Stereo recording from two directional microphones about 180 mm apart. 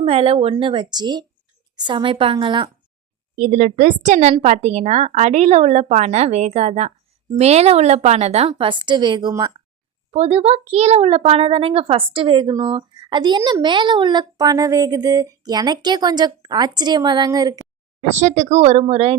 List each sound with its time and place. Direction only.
0.0 s a child's voice: 35° right (ahead or behind)
3.3 s a woman's voice: 45° right (ahead or behind); by 9.5 s 25° right (ahead or behind)
10.1 s a child's voice: 35° right (ahead or behind)
18.2 s a woman's voice: 40° right (ahead or behind)